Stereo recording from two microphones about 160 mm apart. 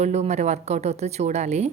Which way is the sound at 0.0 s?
45° right (ahead or behind).